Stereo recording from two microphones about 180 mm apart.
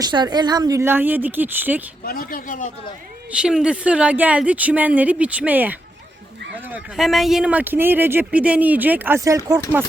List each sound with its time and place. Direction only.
0.0 s speech: 25° right (ahead or behind)
2.0 s a man's voice: 50° left (ahead or behind)
3.3 s speech: 5° right (ahead or behind)
6.9 s speech: centre (ahead or behind); by 9.8 s 20° right (ahead or behind)